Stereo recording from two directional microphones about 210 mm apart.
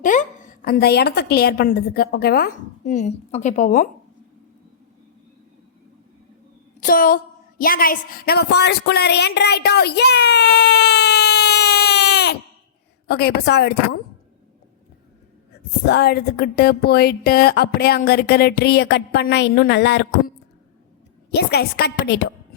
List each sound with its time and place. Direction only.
0.0 s speech: 40° left (ahead or behind)
6.7 s a sound: 40° left (ahead or behind)
7.6 s a woman's voice: 45° left (ahead or behind)
15.9 s speech: 50° left (ahead or behind)
21.3 s speech: 50° left (ahead or behind)